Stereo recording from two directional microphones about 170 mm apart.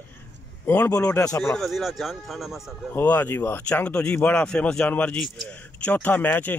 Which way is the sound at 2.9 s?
10° left (ahead or behind).